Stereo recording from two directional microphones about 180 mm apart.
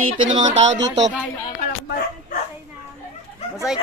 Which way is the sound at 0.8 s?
80° right.